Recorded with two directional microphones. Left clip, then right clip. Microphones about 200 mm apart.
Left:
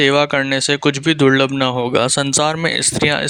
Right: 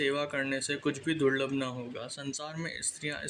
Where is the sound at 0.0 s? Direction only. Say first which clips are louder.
Left 17 dB; 50° left (ahead or behind).